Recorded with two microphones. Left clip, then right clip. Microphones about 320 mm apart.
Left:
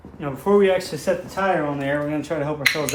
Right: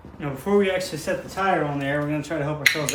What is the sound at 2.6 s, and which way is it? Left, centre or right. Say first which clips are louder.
Speech: right 1 dB; centre.